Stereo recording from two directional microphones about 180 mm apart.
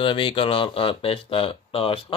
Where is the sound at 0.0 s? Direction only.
30° left (ahead or behind).